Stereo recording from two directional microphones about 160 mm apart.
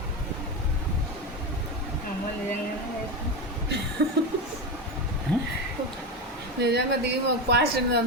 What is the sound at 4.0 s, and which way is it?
Speech, 90° right.